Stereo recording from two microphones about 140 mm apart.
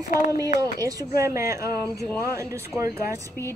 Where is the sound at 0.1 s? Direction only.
90° left.